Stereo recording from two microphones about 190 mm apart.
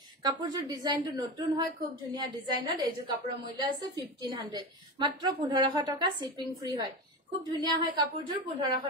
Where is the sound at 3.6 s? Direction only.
25° right (ahead or behind).